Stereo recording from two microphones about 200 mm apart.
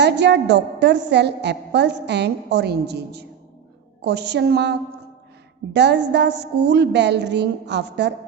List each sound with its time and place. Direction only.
0.0 s a woman's voice: 60° right (ahead or behind)